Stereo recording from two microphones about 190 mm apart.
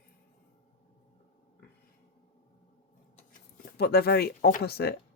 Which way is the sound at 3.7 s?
55° left (ahead or behind).